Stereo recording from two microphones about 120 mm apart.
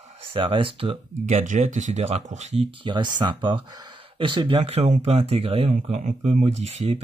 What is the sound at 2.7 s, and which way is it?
Speech, 40° right (ahead or behind).